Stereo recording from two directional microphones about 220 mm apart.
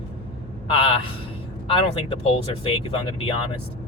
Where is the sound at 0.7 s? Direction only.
25° left (ahead or behind).